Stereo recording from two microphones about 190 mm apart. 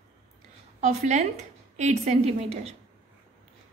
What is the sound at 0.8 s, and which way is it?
A woman's voice, 35° right (ahead or behind).